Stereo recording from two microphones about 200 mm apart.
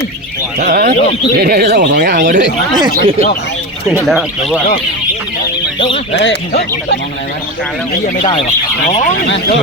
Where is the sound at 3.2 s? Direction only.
45° left (ahead or behind).